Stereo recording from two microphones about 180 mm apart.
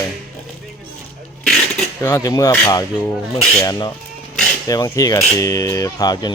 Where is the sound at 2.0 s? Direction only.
20° left (ahead or behind).